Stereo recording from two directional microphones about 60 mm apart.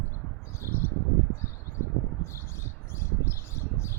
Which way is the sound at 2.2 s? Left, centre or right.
Left.